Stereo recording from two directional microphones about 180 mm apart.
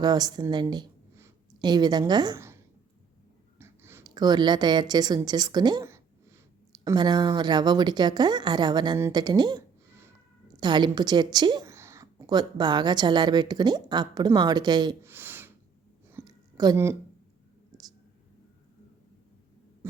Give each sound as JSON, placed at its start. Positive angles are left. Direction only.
{"t": 0.0, "sound": "speech", "side_deg": -20}
{"t": 3.6, "sound": "speech", "side_deg": -15}
{"t": 15.0, "sound": "gasp", "side_deg": -10}
{"t": 16.1, "sound": "a sound", "side_deg": -20}
{"t": 19.8, "sound": "hum", "side_deg": -15}